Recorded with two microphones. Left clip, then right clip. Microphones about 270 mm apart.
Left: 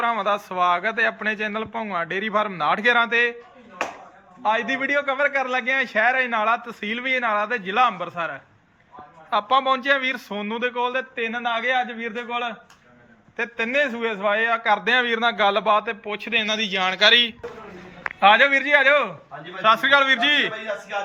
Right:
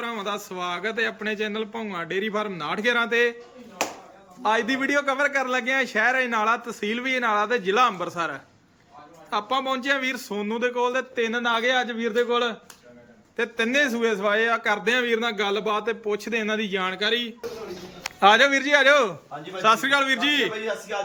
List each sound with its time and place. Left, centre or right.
0.0 s a man's voice: centre
4.4 s a man's voice: centre
18.2 s a man's voice: centre